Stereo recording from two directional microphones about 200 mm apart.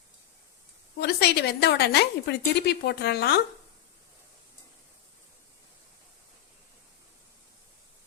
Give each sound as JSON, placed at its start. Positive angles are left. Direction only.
{"t": 0.9, "sound": "a woman's voice", "side_deg": 55}